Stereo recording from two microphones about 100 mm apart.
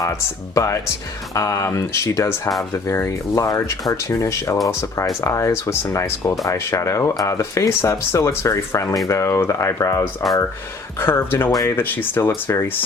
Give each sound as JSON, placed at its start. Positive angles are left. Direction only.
{"t": 0.0, "sound": "speech", "side_deg": 35}
{"t": 11.0, "sound": "speech", "side_deg": 20}